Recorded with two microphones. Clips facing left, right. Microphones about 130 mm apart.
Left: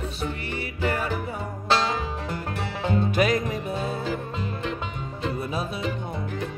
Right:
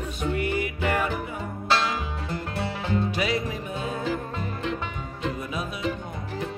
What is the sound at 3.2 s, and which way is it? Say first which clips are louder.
Music: left 4 dB; 45° left (ahead or behind).